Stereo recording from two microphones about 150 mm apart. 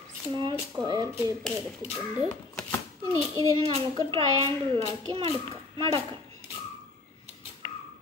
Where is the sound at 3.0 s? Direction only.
20° left (ahead or behind).